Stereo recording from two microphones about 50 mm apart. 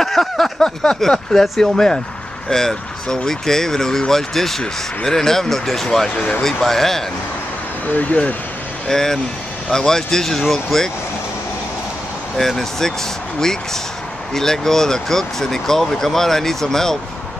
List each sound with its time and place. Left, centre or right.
0.0 s a sound: centre
0.6 s speech: centre
7.9 s speech: left
8.8 s speech: centre
12.4 s speech: centre
14.3 s speech: centre